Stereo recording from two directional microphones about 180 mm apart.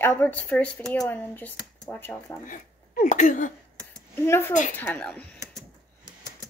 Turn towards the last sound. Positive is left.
turn(degrees=10)  # may be behind; listen again after turning